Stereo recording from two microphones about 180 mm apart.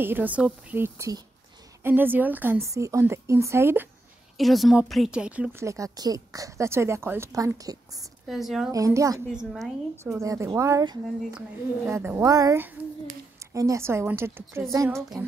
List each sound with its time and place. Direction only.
0.0 s speech: 10° right (ahead or behind)
4.4 s speech: centre (ahead or behind); by 8.0 s 20° right (ahead or behind)
8.3 s a woman's voice: centre (ahead or behind)
8.7 s a woman's voice: 20° right (ahead or behind)
9.3 s a woman's voice: 5° right (ahead or behind)
10.0 s speech: 20° right (ahead or behind)